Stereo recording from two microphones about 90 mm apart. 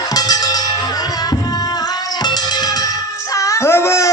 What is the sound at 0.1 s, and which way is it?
Music, 45° left (ahead or behind).